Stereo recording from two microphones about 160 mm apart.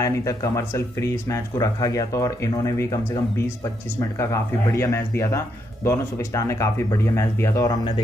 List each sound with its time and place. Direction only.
0.0 s speech: 20° left (ahead or behind)